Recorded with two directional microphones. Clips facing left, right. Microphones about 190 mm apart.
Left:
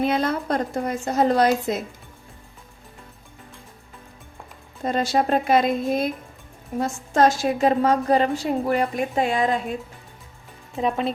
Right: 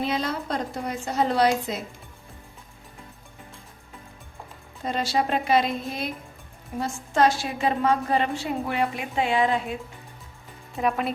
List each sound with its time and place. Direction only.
0.0 s a woman's voice: 55° left (ahead or behind)
4.8 s a woman's voice: 50° left (ahead or behind)
10.8 s speech: 25° left (ahead or behind)